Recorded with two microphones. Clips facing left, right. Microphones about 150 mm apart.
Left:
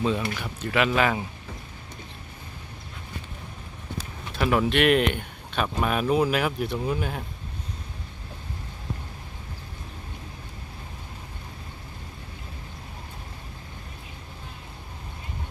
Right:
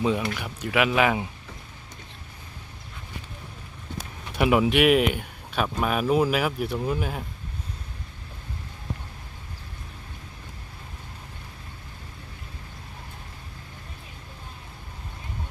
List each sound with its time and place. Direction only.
0.0 s speech: 15° right (ahead or behind)
4.4 s speech: 10° right (ahead or behind)